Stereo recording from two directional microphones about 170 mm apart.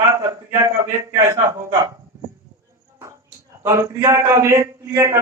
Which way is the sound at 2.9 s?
20° right (ahead or behind).